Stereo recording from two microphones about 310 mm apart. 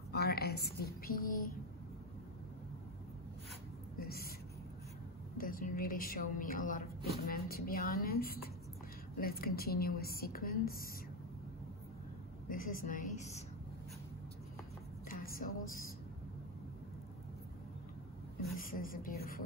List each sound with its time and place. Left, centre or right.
0.1 s speech: left
4.0 s speech: left
5.4 s a woman's voice: left
12.4 s a woman's voice: left
15.0 s music: left
18.6 s a woman's voice: left